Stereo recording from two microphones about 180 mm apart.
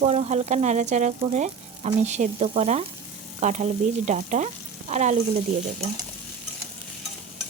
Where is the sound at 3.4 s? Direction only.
40° right (ahead or behind).